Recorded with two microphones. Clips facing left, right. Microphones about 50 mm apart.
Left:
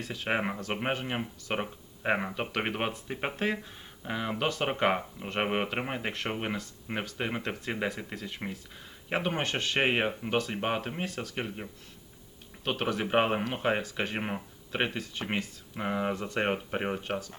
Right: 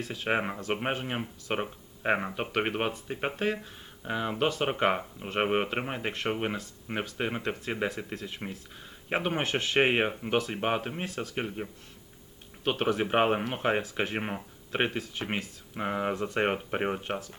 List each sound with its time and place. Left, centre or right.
0.0 s speech: centre
9.2 s speech: centre
14.7 s speech: centre
15.3 s speech: centre